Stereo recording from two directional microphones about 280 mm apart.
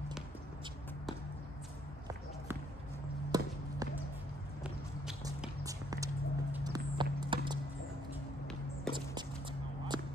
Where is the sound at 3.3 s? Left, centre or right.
Centre.